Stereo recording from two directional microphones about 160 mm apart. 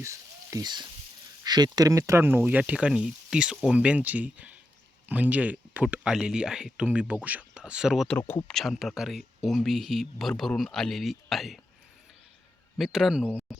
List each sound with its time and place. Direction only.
0.0 s speech: 20° right (ahead or behind); by 11.6 s centre (ahead or behind)
12.7 s speech: centre (ahead or behind)